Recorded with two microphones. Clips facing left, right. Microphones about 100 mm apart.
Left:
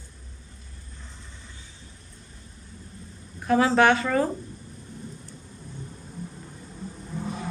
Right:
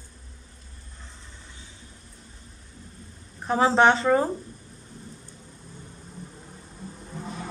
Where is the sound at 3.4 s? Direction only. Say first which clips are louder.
Even; 30° right (ahead or behind).